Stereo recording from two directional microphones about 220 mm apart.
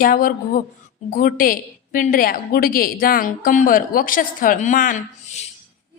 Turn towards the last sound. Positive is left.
turn(degrees=30)  # may be behind; listen again after turning